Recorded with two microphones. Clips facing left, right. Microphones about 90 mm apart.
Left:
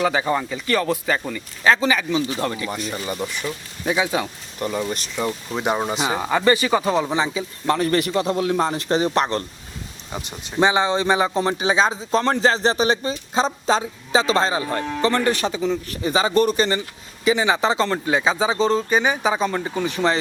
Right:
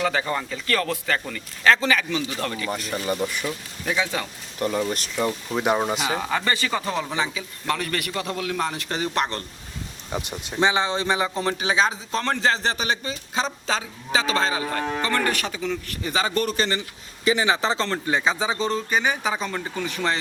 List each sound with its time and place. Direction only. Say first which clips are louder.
0.0 s speech: left 4 dB; 15° left (ahead or behind)
2.6 s speech: right 1 dB; centre (ahead or behind)
3.8 s speech: left 4 dB; 15° left (ahead or behind)
4.9 s speech: even; centre (ahead or behind)
6.1 s a man's voice: left 6 dB; 20° left (ahead or behind)
10.6 s a man's voice: left 4 dB; 20° left (ahead or behind)